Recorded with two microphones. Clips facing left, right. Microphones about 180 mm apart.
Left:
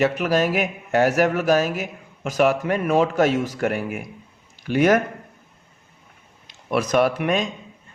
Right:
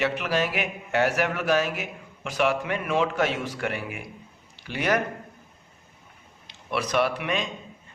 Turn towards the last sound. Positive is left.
turn(degrees=45)  # may be behind; listen again after turning